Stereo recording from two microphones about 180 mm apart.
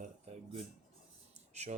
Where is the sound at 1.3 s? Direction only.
40° right (ahead or behind).